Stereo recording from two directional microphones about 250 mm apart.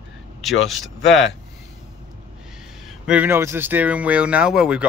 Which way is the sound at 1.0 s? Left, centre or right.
Left.